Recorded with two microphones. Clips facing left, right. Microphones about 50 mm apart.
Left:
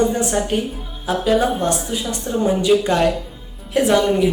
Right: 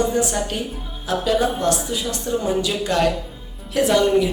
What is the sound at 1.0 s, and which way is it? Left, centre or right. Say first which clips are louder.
A woman's voice: left 2 dB; centre.